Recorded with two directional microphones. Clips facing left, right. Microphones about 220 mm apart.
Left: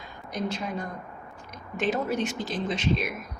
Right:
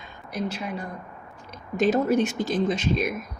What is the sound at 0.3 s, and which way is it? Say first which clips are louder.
Speech: right 1 dB; 10° right (ahead or behind).